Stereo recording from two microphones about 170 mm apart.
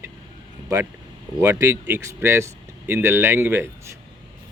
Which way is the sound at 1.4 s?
20° right (ahead or behind).